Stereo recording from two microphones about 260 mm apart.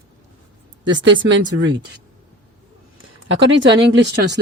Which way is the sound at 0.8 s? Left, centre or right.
Right.